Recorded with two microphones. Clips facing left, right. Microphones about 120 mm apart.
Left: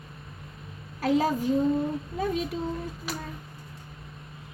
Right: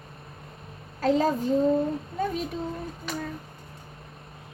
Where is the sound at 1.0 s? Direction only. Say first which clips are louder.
Right 1 dB; 10° left (ahead or behind).